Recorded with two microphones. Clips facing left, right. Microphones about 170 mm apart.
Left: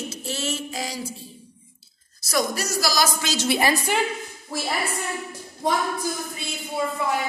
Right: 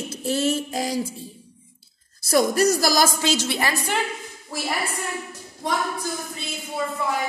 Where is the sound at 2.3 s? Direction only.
50° right (ahead or behind).